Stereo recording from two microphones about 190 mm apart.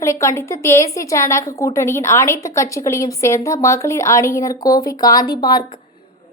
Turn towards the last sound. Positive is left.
turn(degrees=20)  # may be behind; listen again after turning